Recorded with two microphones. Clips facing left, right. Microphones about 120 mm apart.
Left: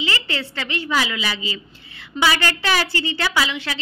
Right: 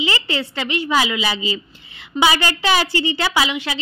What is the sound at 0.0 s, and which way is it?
A woman's voice, 15° right (ahead or behind).